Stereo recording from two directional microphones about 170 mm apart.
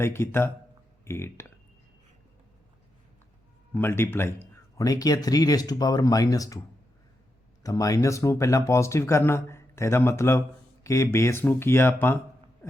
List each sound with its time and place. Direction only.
0.0 s speech: 15° left (ahead or behind)
3.8 s speech: 15° left (ahead or behind)
7.6 s speech: 20° left (ahead or behind)